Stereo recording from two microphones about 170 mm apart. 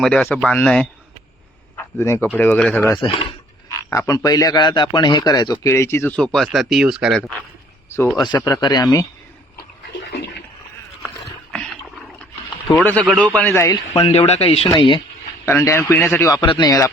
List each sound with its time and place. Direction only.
0.0 s speech: 5° left (ahead or behind)
1.7 s a sound: 15° left (ahead or behind)
2.3 s speech: 10° left (ahead or behind)
3.0 s speech: 30° left (ahead or behind)
3.8 s a man's voice: 20° left (ahead or behind); by 7.2 s 5° right (ahead or behind)
7.9 s a man's voice: 15° left (ahead or behind)
10.1 s toilet flush: 85° left
12.7 s speech: 10° left (ahead or behind)
14.0 s speech: 35° left (ahead or behind)
15.4 s a man's voice: 15° left (ahead or behind)